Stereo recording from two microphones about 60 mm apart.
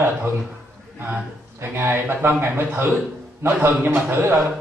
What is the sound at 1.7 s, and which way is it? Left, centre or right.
A man's voice, right.